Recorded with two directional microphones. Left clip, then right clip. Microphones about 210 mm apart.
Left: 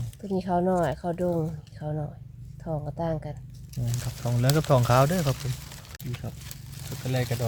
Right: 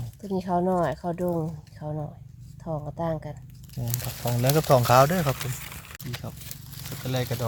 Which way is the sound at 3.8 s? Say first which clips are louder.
Right 3 dB; 5° right (ahead or behind).